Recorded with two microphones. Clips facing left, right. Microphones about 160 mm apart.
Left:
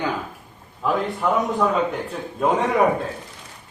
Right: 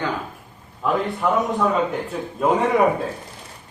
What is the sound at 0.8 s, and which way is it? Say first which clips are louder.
A man's voice: right 1 dB; centre (ahead or behind).